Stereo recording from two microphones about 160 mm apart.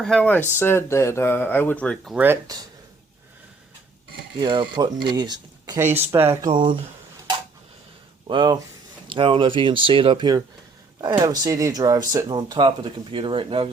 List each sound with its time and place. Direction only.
0.0 s speech: 5° left (ahead or behind)
2.1 s speech: 15° right (ahead or behind)
4.4 s speech: 30° right (ahead or behind)
6.5 s speech: 30° right (ahead or behind)
8.3 s speech: 30° right (ahead or behind)